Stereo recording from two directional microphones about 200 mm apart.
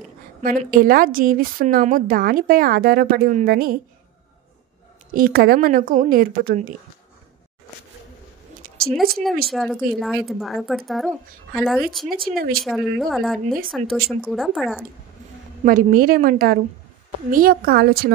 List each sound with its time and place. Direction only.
0.4 s a woman's voice: 45° right (ahead or behind)
5.1 s a woman's voice: 45° right (ahead or behind)
9.5 s speech: centre (ahead or behind)
12.2 s a woman's voice: 45° right (ahead or behind)
12.6 s speech: centre (ahead or behind)
15.6 s a woman's voice: 45° right (ahead or behind)